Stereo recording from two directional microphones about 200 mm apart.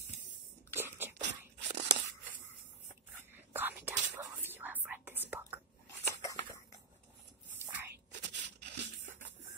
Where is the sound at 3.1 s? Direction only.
10° right (ahead or behind).